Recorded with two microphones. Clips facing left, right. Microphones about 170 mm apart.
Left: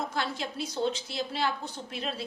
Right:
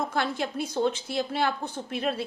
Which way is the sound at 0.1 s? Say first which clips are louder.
Right 5 dB; 55° right (ahead or behind).